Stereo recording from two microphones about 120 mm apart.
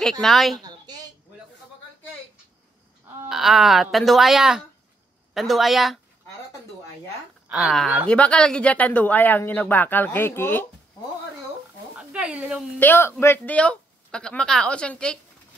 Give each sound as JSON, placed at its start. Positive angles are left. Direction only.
{"t": 0.0, "sound": "speech", "side_deg": 0}
{"t": 0.7, "sound": "a sound", "side_deg": -35}
{"t": 3.3, "sound": "speech", "side_deg": 0}
{"t": 7.5, "sound": "speech", "side_deg": 0}
{"t": 12.0, "sound": "a sound", "side_deg": -10}
{"t": 12.7, "sound": "speech", "side_deg": 15}